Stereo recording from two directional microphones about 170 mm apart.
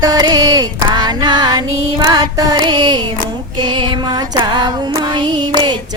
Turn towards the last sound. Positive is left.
turn(degrees=-25)  # may be behind; listen again after turning